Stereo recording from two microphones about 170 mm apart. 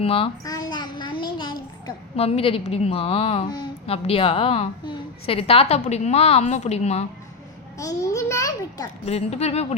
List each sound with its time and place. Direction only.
0.0 s a woman's voice: 35° left (ahead or behind)
0.4 s child singing: 25° left (ahead or behind)
2.1 s a woman's voice: 35° left (ahead or behind)
7.8 s a child's voice: 20° left (ahead or behind)
9.0 s a woman's voice: 40° left (ahead or behind)